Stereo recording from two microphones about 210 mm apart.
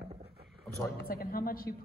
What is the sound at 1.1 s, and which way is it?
Speech, 45° left (ahead or behind).